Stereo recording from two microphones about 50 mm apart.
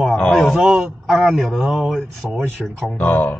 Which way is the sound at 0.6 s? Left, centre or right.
Centre.